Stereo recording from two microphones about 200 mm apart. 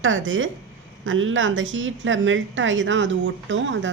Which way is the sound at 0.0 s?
75° right (ahead or behind).